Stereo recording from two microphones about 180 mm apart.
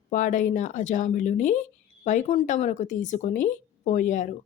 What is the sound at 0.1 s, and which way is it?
Speech, 45° left (ahead or behind).